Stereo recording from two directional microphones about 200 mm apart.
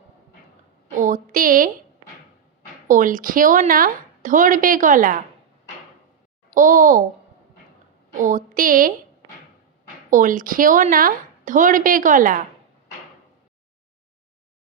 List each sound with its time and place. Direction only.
0.9 s a sound: 40° right (ahead or behind)
2.8 s a woman's voice: 40° right (ahead or behind)
6.5 s a woman's voice: 40° right (ahead or behind)
8.2 s a woman's voice: 40° right (ahead or behind)
10.1 s a woman's voice: 40° right (ahead or behind)